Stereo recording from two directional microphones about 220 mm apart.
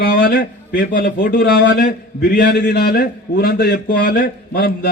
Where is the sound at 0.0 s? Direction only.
45° left (ahead or behind).